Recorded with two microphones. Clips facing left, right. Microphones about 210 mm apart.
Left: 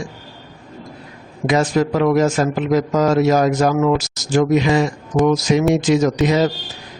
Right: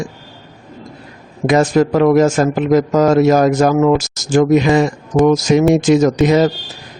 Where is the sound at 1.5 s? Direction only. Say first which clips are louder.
Right 4 dB; 50° right (ahead or behind).